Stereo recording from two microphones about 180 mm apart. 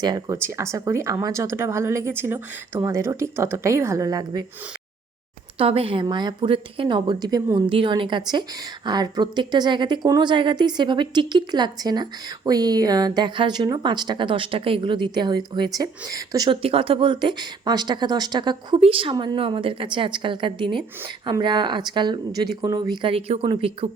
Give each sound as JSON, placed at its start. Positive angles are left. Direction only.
{"t": 0.0, "sound": "speech", "side_deg": -20}
{"t": 5.5, "sound": "a woman's voice", "side_deg": -30}